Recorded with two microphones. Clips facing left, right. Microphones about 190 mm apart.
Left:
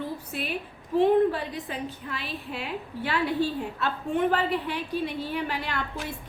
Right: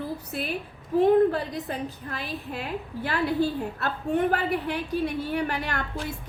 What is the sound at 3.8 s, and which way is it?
A woman's voice, 40° right (ahead or behind).